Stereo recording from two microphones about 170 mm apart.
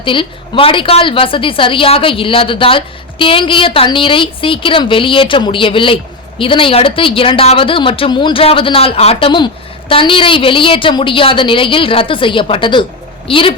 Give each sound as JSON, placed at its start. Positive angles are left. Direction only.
{"t": 0.0, "sound": "a woman's voice", "side_deg": 30}